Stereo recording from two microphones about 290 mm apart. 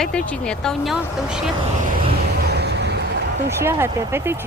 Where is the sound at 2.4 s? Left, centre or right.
Right.